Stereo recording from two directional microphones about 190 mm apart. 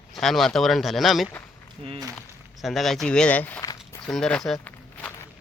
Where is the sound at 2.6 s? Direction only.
Centre (ahead or behind).